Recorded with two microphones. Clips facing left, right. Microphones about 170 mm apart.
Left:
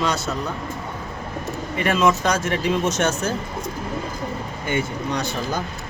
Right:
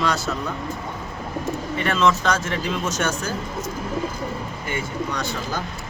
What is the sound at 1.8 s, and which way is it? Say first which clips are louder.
Speech: left 2 dB; 10° left (ahead or behind).